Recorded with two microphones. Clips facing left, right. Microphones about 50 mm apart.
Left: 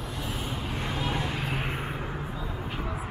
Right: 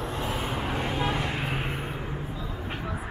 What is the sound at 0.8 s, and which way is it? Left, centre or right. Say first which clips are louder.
Vehicle: right 1 dB; right.